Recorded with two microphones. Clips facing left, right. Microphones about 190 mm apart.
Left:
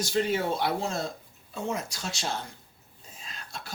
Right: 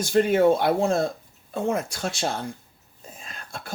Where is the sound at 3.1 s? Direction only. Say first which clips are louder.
Right 3 dB; 50° right (ahead or behind).